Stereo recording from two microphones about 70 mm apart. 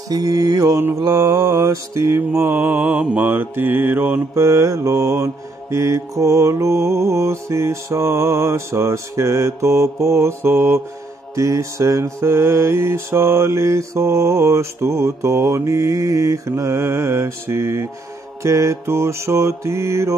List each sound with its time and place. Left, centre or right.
0.1 s mantra: right
2.8 s mantra: centre
3.2 s mantra: right
4.4 s mantra: right